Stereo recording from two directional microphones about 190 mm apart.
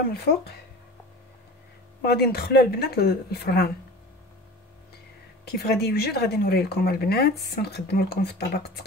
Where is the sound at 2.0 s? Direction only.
55° left (ahead or behind).